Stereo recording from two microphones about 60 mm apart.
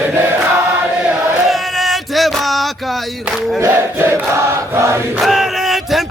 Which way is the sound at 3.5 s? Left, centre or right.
Right.